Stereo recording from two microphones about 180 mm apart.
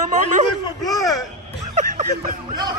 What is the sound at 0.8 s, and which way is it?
Speech, 20° left (ahead or behind).